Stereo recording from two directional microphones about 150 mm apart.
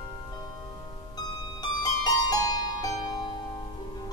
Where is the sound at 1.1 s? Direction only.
25° left (ahead or behind).